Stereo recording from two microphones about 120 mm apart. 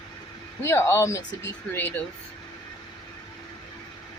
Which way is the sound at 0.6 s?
20° left (ahead or behind).